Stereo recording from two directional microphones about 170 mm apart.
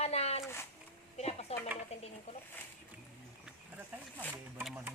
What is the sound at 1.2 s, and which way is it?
Speech, 40° left (ahead or behind).